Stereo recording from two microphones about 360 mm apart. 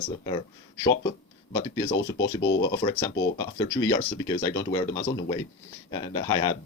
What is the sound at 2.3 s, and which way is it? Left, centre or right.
Speech, left.